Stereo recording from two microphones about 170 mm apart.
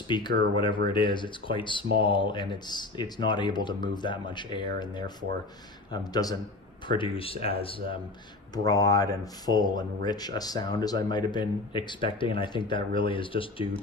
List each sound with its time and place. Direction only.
0.1 s speech: 25° left (ahead or behind)
8.5 s speech: 20° left (ahead or behind)